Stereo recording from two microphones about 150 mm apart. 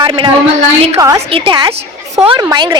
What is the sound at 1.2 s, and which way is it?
A woman's voice, 40° right (ahead or behind).